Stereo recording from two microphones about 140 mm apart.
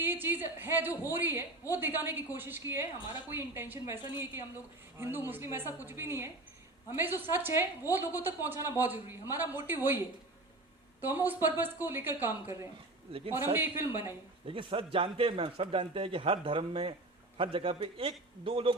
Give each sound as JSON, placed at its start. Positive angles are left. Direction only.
{"t": 0.0, "sound": "a woman's voice", "side_deg": -15}
{"t": 11.0, "sound": "a woman's voice", "side_deg": -15}
{"t": 13.1, "sound": "a man's voice", "side_deg": -40}
{"t": 13.3, "sound": "a woman's voice", "side_deg": -15}
{"t": 14.4, "sound": "speech", "side_deg": -40}